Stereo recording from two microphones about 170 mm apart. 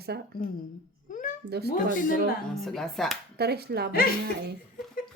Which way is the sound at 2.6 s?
Centre (ahead or behind).